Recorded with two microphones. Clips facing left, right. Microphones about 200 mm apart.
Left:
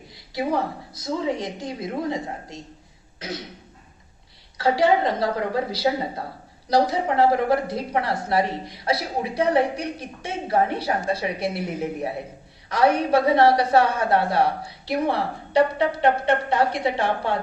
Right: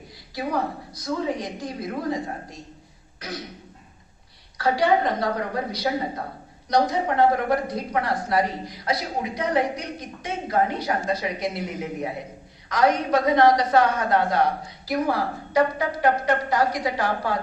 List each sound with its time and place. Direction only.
0.3 s a woman's voice: 25° left (ahead or behind)
3.2 s throat clearing: 25° left (ahead or behind)
4.5 s a woman's voice: 25° left (ahead or behind)
12.6 s a woman's voice: 30° left (ahead or behind)